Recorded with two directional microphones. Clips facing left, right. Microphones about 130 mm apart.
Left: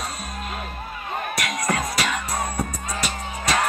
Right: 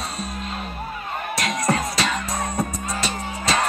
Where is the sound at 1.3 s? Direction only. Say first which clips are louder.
Right 4 dB; 25° right (ahead or behind).